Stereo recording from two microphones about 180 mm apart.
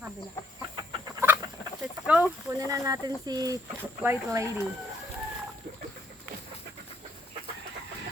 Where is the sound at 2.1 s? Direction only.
10° right (ahead or behind).